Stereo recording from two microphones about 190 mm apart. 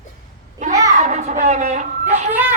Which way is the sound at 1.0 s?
35° right (ahead or behind).